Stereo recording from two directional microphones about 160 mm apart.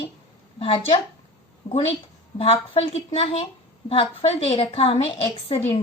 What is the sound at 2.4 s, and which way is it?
A woman's voice, 40° left (ahead or behind).